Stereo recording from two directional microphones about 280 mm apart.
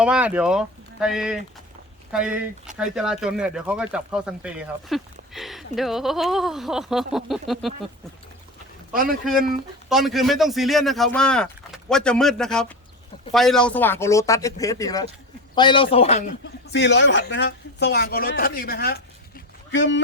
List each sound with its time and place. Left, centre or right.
0.0 s speech: centre
9.9 s a man's voice: centre; by 16.2 s left
16.7 s speech: left